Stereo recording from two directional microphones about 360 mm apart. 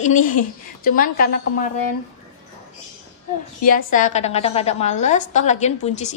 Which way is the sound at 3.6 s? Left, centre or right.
Left.